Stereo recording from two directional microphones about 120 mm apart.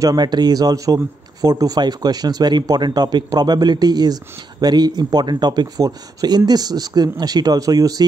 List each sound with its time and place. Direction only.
0.0 s speech: 35° right (ahead or behind)